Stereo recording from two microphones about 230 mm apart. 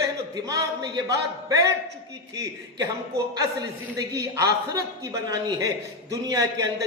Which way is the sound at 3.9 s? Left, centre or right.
Centre.